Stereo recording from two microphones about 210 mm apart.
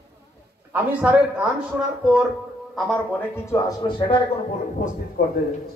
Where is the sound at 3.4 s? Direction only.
15° left (ahead or behind).